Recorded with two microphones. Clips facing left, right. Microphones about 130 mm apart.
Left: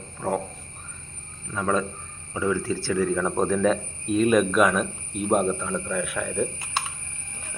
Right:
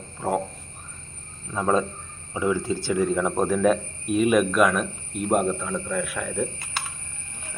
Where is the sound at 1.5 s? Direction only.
25° right (ahead or behind).